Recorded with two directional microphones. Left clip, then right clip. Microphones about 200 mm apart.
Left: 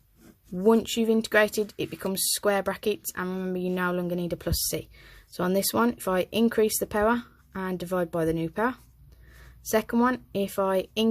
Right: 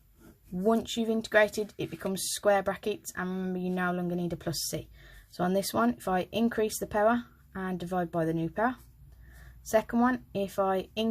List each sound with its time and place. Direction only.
0.5 s speech: 35° left (ahead or behind)